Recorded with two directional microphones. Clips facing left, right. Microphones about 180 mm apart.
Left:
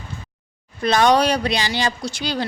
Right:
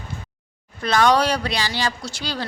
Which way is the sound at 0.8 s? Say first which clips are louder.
Left 2 dB; 20° left (ahead or behind).